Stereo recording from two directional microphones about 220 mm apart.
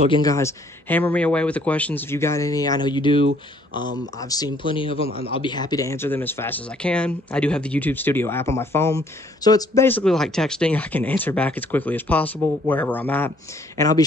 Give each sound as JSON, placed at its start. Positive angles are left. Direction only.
{"t": 0.1, "sound": "speech", "side_deg": 15}